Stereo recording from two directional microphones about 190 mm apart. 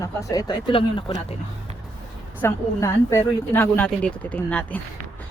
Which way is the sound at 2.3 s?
15° left (ahead or behind).